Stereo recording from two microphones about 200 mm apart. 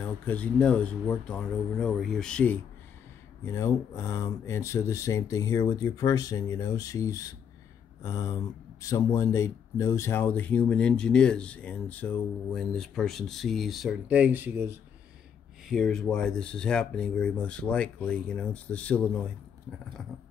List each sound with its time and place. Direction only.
0.0 s speech: 5° left (ahead or behind); by 14.7 s 10° right (ahead or behind)
15.7 s speech: centre (ahead or behind)